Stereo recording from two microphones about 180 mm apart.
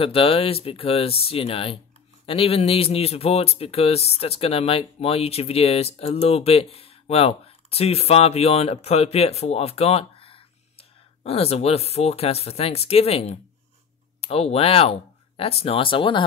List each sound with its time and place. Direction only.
0.0 s speech: 30° left (ahead or behind)